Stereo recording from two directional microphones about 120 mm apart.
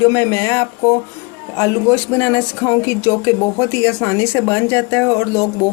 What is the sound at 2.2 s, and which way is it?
Speech, 20° left (ahead or behind).